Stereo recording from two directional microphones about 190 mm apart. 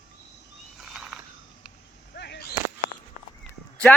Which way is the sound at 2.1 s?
60° left (ahead or behind).